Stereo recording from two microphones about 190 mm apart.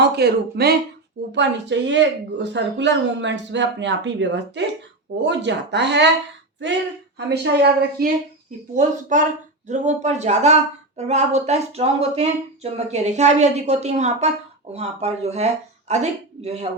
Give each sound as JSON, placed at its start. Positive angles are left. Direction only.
{"t": 0.0, "sound": "speech", "side_deg": -60}
{"t": 7.3, "sound": "speech", "side_deg": -60}
{"t": 8.7, "sound": "speech", "side_deg": -40}